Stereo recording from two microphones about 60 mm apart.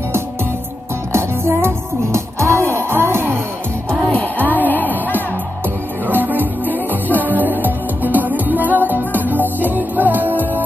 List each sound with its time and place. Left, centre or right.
1.1 s music: right
4.1 s music: left
6.0 s music: right